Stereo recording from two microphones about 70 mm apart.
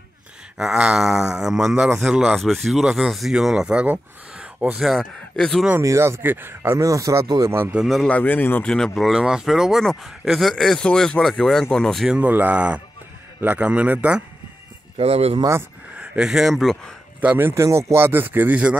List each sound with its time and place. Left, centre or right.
0.6 s speech: centre
4.8 s speech: centre
5.8 s speech: right
6.8 s speech: right
7.4 s speech: right
7.7 s speech: centre
8.1 s a man's voice: left
8.6 s speech: centre
8.9 s speech: centre
12.1 s speech: right
16.3 s speech: centre
17.4 s speech: right
17.6 s speech: right
17.9 s speech: right